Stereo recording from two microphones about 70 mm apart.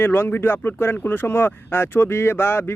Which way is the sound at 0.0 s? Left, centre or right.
Left.